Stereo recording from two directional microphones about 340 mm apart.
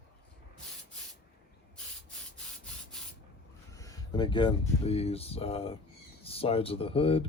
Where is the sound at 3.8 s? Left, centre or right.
Centre.